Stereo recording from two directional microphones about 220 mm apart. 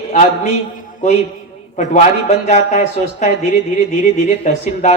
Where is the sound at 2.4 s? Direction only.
30° left (ahead or behind).